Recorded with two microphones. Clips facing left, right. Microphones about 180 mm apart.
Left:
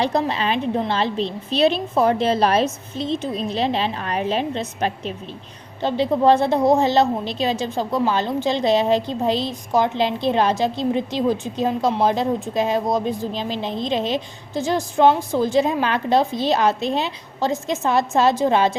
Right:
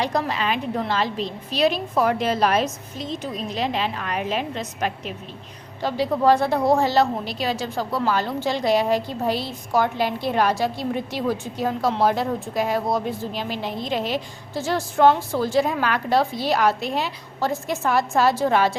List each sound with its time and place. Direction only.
0.0 s a woman's voice: 25° left (ahead or behind)